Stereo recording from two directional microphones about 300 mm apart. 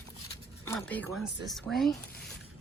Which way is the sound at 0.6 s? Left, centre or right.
Centre.